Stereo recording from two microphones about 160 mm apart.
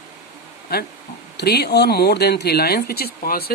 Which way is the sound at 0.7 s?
80° left.